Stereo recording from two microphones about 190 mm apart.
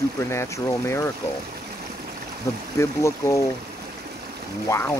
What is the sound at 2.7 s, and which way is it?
Speech, 15° left (ahead or behind).